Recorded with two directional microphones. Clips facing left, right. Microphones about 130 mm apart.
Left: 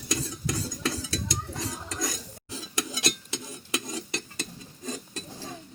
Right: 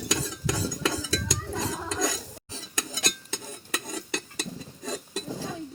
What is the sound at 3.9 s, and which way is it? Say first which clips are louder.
Stir: right 1 dB; 65° right (ahead or behind).